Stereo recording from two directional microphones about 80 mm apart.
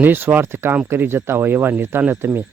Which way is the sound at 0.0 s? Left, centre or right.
Right.